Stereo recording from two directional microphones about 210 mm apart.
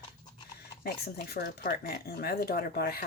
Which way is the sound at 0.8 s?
45° left (ahead or behind).